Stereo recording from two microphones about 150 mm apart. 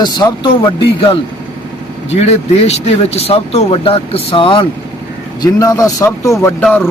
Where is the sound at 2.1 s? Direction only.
45° left (ahead or behind).